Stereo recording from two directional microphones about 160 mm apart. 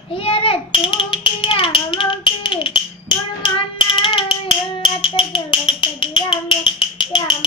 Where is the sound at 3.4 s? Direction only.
30° left (ahead or behind).